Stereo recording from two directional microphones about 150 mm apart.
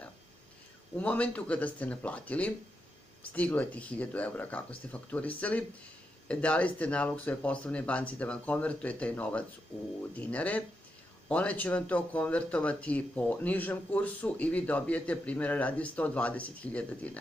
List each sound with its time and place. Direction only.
0.9 s speech: 10° left (ahead or behind)